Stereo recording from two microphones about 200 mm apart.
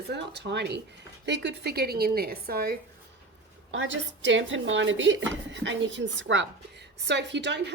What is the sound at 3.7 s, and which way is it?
Speech, 70° right (ahead or behind).